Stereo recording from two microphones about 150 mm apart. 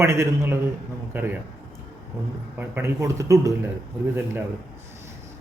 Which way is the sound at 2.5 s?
15° right (ahead or behind).